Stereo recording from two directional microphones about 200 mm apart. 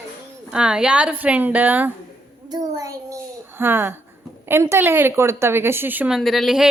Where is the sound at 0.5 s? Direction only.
5° right (ahead or behind).